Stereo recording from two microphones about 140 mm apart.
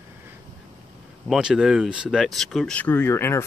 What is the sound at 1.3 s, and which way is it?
Speech, 5° right (ahead or behind).